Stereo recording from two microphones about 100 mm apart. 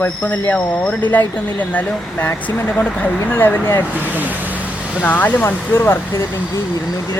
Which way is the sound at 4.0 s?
15° right (ahead or behind).